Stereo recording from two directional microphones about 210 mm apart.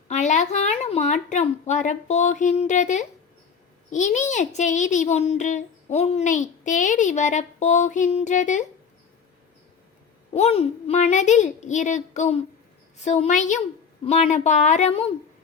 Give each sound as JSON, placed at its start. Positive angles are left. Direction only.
{"t": 0.1, "sound": "a woman's voice", "side_deg": 35}
{"t": 10.3, "sound": "a child's voice", "side_deg": 30}